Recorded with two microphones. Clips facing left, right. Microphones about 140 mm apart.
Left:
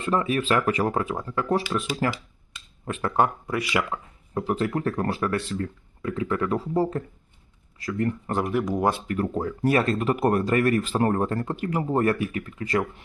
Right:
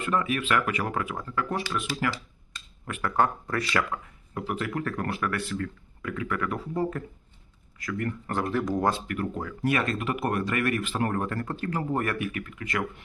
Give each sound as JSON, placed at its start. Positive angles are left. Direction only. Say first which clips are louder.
{"t": 0.0, "sound": "speech", "louder": "left 3 dB", "side_deg": 30}
{"t": 3.4, "sound": "speech", "louder": "left 2 dB", "side_deg": 10}
{"t": 3.9, "sound": "speech", "louder": "left 5 dB", "side_deg": 30}
{"t": 9.0, "sound": "speech", "louder": "left 5 dB", "side_deg": 35}